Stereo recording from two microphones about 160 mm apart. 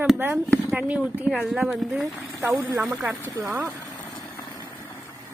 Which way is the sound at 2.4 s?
15° right (ahead or behind).